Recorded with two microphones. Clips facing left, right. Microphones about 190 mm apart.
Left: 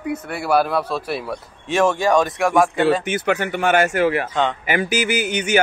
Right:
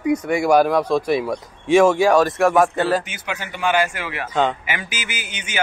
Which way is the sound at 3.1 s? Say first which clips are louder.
Left 10 dB; 55° left (ahead or behind).